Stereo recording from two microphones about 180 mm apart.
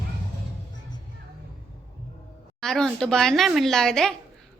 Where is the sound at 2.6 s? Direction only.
5° left (ahead or behind).